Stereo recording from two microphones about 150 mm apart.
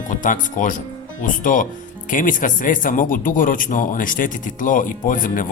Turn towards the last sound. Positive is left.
turn(degrees=60)  # may be behind; listen again after turning